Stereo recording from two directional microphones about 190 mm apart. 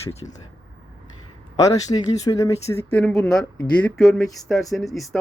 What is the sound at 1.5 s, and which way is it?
Speech, 20° left (ahead or behind).